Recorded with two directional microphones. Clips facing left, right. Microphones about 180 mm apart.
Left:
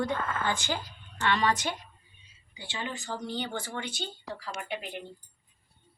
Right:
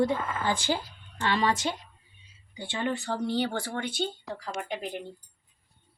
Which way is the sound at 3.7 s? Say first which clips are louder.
Right 6 dB; 55° right (ahead or behind).